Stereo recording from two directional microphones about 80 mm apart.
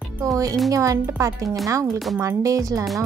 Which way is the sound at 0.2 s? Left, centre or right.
Right.